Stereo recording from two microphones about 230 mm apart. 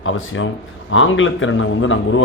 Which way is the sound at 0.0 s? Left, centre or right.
Left.